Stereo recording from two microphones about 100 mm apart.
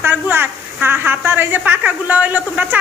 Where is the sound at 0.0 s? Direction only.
20° right (ahead or behind).